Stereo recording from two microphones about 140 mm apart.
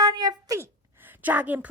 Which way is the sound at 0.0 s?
25° right (ahead or behind).